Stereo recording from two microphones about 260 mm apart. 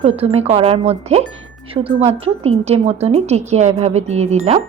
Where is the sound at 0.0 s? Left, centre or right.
Right.